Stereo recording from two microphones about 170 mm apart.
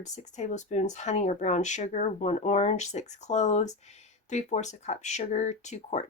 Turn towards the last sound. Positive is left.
turn(degrees=40)  # may be behind; listen again after turning